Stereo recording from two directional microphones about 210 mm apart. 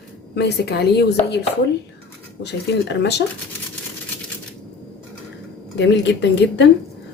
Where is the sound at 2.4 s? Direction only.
55° left (ahead or behind).